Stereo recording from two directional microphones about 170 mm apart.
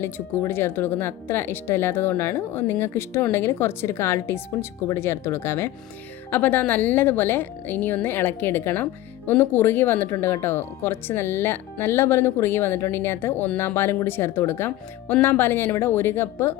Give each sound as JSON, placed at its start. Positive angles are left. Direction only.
{"t": 0.0, "sound": "a woman's voice", "side_deg": 15}